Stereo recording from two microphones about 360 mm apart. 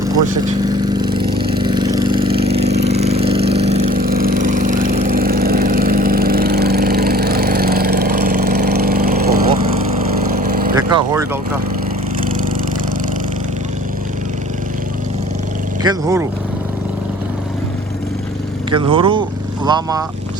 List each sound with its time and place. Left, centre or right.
0.6 s vehicle: centre
10.8 s vehicle: centre
15.8 s speech: centre
18.7 s speech: centre